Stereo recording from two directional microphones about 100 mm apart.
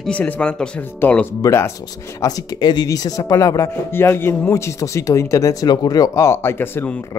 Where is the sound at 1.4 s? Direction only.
30° left (ahead or behind).